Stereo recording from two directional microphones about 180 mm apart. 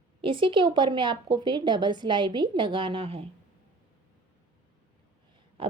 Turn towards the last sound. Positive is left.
turn(degrees=-30)  # may be behind; listen again after turning